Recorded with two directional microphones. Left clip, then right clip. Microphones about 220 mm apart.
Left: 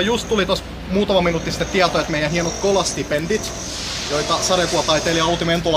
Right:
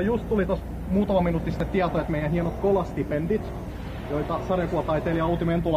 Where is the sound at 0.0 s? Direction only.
20° left (ahead or behind).